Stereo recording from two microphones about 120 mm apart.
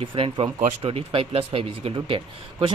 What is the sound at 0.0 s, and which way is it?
Speech, 50° right (ahead or behind).